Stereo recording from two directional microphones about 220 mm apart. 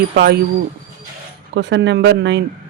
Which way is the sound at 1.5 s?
55° right (ahead or behind).